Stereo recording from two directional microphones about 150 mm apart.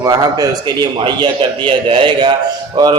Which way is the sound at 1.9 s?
35° right (ahead or behind).